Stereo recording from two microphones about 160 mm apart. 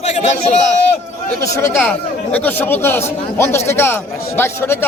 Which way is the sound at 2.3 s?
10° left (ahead or behind).